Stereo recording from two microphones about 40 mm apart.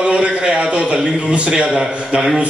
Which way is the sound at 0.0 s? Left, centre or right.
Right.